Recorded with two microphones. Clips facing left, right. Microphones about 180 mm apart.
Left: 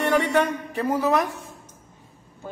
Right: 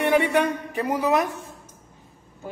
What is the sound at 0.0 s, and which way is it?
A man's voice, 15° right (ahead or behind).